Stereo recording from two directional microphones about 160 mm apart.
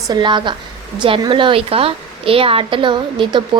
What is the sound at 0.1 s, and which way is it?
A woman's voice, 30° right (ahead or behind).